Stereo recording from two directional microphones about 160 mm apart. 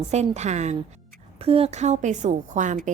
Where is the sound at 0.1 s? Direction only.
45° right (ahead or behind).